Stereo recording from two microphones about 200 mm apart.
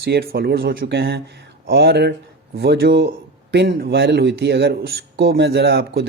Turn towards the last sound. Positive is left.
turn(degrees=-55)  # may be behind; listen again after turning